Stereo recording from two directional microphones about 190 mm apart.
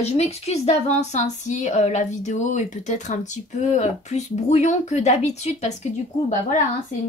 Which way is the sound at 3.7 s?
35° left (ahead or behind).